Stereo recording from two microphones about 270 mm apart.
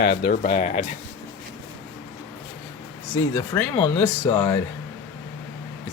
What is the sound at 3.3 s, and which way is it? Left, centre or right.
Speech, centre.